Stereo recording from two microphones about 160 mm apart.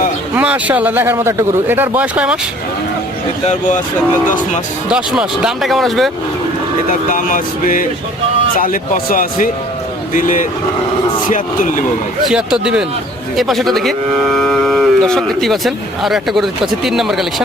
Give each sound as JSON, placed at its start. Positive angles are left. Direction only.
{"t": 0.3, "sound": "speech", "side_deg": -10}
{"t": 3.4, "sound": "speech", "side_deg": 45}
{"t": 4.9, "sound": "speech", "side_deg": -5}
{"t": 7.1, "sound": "speech", "side_deg": 55}
{"t": 12.3, "sound": "speech", "side_deg": -5}